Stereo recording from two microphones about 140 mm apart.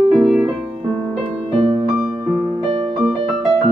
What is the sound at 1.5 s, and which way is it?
Music, 45° right (ahead or behind).